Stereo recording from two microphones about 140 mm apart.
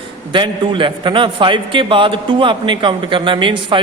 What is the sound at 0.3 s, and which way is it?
A man's voice, 35° right (ahead or behind).